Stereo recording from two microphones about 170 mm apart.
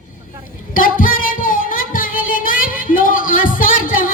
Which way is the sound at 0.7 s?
55° left (ahead or behind).